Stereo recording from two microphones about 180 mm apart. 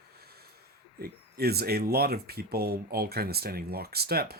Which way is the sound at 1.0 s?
60° right (ahead or behind).